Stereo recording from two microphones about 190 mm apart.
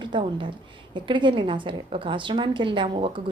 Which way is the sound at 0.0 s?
25° right (ahead or behind).